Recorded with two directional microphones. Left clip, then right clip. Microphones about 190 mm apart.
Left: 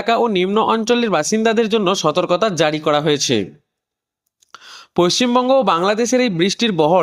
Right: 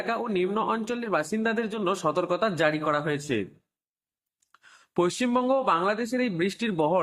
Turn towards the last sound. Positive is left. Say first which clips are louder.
# left 11 dB
turn(degrees=45)  # may be behind; listen again after turning